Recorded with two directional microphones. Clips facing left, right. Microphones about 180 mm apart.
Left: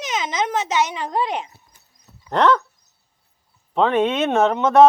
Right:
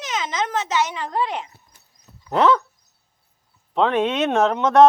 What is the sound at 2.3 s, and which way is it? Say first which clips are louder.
Speech: even; 5° right (ahead or behind).